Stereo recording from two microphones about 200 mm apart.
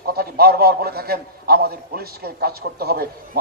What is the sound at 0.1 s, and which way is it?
A man's voice, 50° right (ahead or behind).